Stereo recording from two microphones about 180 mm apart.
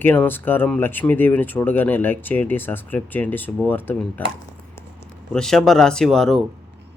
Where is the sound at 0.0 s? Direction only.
10° left (ahead or behind).